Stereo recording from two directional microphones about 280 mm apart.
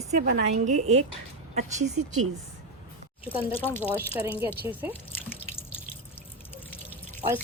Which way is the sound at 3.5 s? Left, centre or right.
Centre.